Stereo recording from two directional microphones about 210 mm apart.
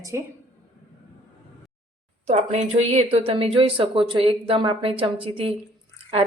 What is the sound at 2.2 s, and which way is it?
Speech, 30° right (ahead or behind).